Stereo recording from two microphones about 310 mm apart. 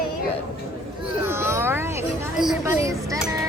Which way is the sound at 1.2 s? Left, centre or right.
Centre.